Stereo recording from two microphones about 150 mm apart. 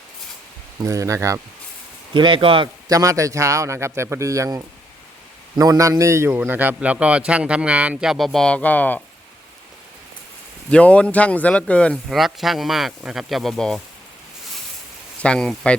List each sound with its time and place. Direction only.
0.8 s speech: 20° right (ahead or behind)
2.1 s speech: 35° right (ahead or behind)
2.9 s a man's voice: 20° right (ahead or behind); by 9.0 s 10° left (ahead or behind)
10.7 s speech: 10° left (ahead or behind)
15.2 s speech: 5° left (ahead or behind)